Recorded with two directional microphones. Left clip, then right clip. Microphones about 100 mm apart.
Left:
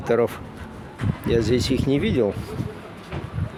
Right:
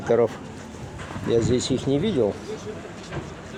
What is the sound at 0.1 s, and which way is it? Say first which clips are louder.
Speech: even; 55° left (ahead or behind).